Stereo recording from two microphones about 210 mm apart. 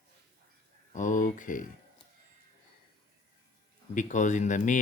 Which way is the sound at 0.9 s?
35° left (ahead or behind).